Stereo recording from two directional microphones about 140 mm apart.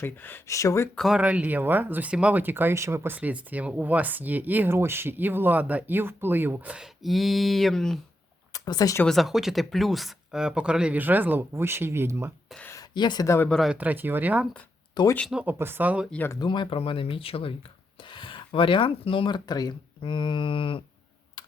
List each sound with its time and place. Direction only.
0.0 s speech: 15° left (ahead or behind)
0.9 s speech: centre (ahead or behind)
1.2 s speech: 10° right (ahead or behind)
8.5 s speech: 25° left (ahead or behind)
9.0 s speech: centre (ahead or behind); by 12.3 s 20° right (ahead or behind)
12.6 s speech: 25° left (ahead or behind)
13.5 s speech: centre (ahead or behind)
13.7 s speech: 10° right (ahead or behind)
15.0 s speech: 35° left (ahead or behind)
15.3 s speech: 10° right (ahead or behind)
16.1 s speech: 15° left (ahead or behind)
16.4 s speech: 35° left (ahead or behind)
21.4 s computer keyboard: 30° left (ahead or behind)